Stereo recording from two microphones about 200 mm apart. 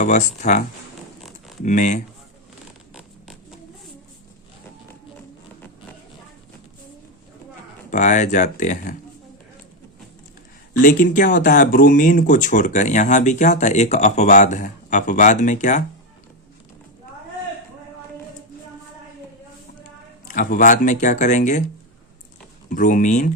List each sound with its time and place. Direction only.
0.0 s speech: 35° left (ahead or behind)
1.6 s speech: 40° left (ahead or behind)
7.9 s speech: 40° left (ahead or behind)
10.8 s speech: 40° left (ahead or behind)
20.2 s speech: 45° left (ahead or behind)
22.7 s speech: 40° left (ahead or behind)